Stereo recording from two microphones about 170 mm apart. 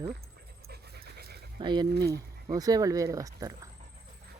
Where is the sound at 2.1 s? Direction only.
20° right (ahead or behind).